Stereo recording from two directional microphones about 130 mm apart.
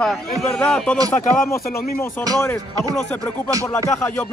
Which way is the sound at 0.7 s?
5° left (ahead or behind).